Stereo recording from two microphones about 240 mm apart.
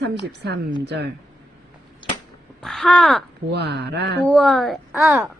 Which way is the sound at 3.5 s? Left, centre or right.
Right.